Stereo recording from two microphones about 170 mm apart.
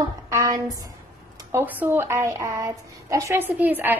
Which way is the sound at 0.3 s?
20° right (ahead or behind).